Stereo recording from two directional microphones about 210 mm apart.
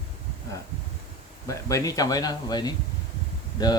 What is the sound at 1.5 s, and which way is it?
Speech, 15° left (ahead or behind).